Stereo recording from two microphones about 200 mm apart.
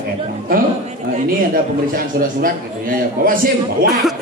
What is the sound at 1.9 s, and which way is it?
A man's voice, 45° right (ahead or behind).